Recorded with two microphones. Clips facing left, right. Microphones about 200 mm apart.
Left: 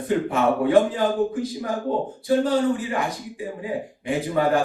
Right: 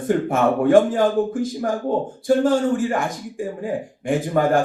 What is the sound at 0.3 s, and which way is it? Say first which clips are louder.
A man's voice: right 5 dB; 50° right (ahead or behind).